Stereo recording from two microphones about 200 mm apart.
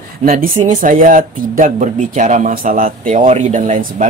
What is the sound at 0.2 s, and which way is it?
Speech, 45° right (ahead or behind).